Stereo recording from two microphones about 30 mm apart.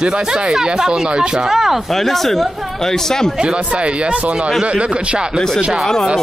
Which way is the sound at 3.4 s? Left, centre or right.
Right.